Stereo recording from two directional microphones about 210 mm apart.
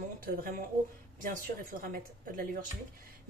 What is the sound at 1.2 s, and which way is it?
A woman's voice, 40° right (ahead or behind).